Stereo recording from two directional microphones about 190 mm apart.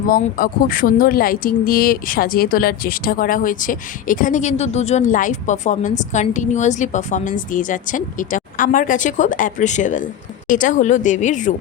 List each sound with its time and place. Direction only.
0.1 s speech: 50° left (ahead or behind)